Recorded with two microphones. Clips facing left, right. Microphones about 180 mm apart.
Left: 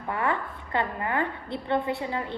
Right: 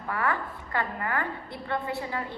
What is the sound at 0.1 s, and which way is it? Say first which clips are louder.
A woman's voice: left 1 dB; 25° left (ahead or behind).